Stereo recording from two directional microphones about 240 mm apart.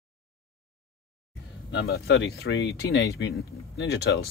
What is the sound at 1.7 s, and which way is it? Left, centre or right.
Speech, left.